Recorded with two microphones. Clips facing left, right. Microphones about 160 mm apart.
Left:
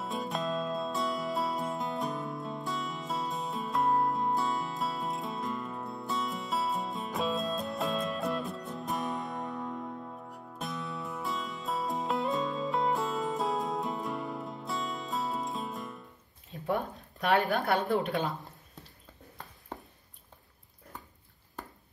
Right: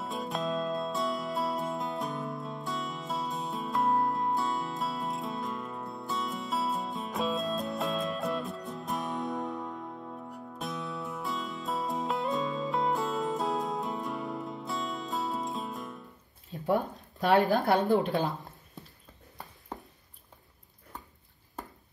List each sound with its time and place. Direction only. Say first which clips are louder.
0.0 s music: even; centre (ahead or behind)
16.9 s speech: right 2 dB; centre (ahead or behind)
17.9 s speech: right 3 dB; 35° right (ahead or behind)